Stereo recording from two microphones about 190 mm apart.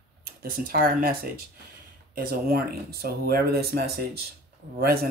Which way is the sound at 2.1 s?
55° right (ahead or behind).